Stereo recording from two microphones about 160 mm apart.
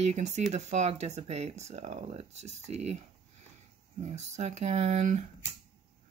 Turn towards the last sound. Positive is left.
turn(degrees=-45)  # may be behind; listen again after turning